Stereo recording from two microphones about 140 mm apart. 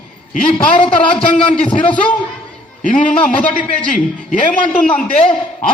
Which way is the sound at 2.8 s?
65° left (ahead or behind).